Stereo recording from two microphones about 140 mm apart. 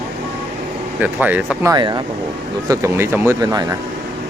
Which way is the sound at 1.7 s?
30° right (ahead or behind).